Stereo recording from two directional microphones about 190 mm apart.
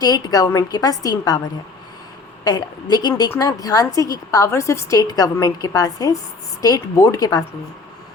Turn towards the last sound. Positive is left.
turn(degrees=20)  # may be behind; listen again after turning